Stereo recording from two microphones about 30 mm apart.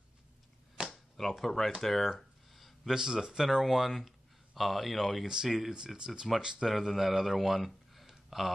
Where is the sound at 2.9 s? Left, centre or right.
Right.